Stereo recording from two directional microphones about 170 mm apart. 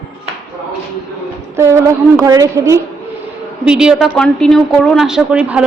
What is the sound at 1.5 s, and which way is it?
A woman's voice, 15° right (ahead or behind).